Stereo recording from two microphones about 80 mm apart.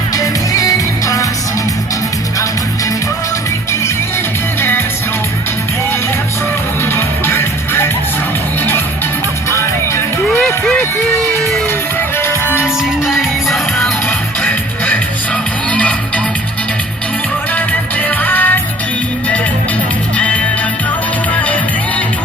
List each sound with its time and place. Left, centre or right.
0.2 s music: left
6.9 s music: left
9.5 s music: left
12.6 s music: centre
14.4 s music: centre
18.2 s music: left
20.1 s music: centre
21.4 s music: centre